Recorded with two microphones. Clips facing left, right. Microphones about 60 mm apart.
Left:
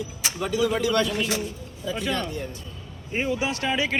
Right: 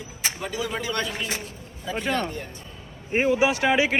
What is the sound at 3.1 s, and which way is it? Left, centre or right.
Speech, right.